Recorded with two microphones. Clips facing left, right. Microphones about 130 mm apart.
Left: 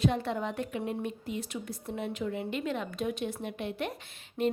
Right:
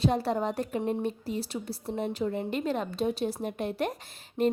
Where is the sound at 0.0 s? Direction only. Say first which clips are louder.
Right 3 dB; 35° right (ahead or behind).